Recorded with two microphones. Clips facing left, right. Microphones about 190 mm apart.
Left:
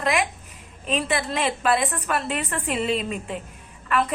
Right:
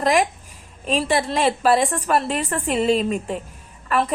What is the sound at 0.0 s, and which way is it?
A woman's voice, 35° right (ahead or behind).